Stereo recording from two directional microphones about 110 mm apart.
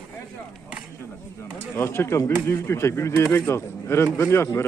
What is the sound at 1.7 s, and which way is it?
Speech, 25° left (ahead or behind).